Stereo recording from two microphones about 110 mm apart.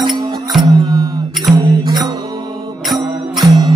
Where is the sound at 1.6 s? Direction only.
40° right (ahead or behind).